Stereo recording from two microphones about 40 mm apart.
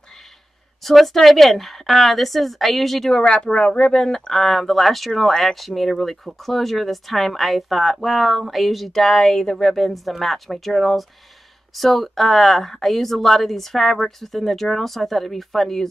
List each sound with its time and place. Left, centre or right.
0.8 s speech: centre
3.2 s speech: centre
4.3 s speech: centre